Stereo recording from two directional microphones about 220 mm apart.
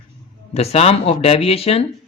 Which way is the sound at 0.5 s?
30° left (ahead or behind).